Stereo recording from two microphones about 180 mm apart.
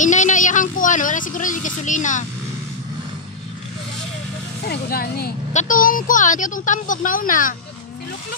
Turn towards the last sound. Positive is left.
turn(degrees=50)  # may be behind; listen again after turning